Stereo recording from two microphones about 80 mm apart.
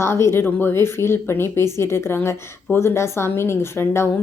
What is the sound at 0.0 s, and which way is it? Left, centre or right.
A woman's voice, left.